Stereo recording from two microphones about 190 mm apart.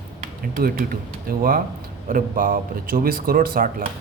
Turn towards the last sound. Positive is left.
turn(degrees=-50)  # may be behind; listen again after turning